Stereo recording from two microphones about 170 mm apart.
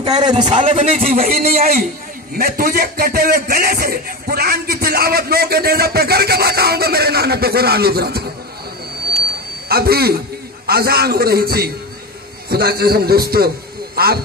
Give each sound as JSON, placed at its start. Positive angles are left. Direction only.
{"t": 0.0, "sound": "a man's voice", "side_deg": -25}
{"t": 0.6, "sound": "a man's voice", "side_deg": -40}
{"t": 1.0, "sound": "speech", "side_deg": -55}
{"t": 9.7, "sound": "a man's voice", "side_deg": -65}